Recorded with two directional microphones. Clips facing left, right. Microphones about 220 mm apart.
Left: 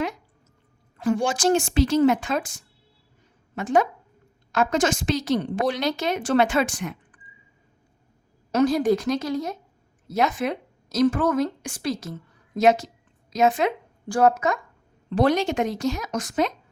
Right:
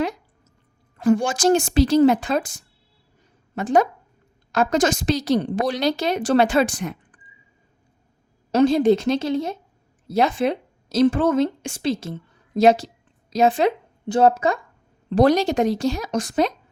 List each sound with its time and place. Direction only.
0.9 s a woman's voice: 45° right (ahead or behind)
8.5 s a woman's voice: 25° right (ahead or behind)